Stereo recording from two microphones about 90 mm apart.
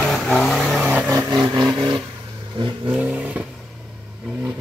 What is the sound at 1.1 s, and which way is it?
Vehicle, 45° right (ahead or behind).